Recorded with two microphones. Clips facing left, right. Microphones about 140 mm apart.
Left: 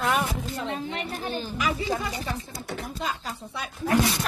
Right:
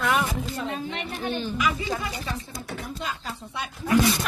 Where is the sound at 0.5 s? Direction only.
25° left (ahead or behind).